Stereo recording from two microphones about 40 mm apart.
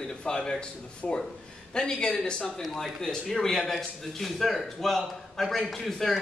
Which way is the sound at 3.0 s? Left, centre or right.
Centre.